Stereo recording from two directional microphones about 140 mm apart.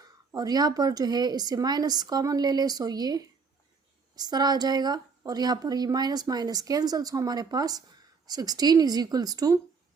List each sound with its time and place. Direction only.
0.3 s a woman's voice: 30° right (ahead or behind)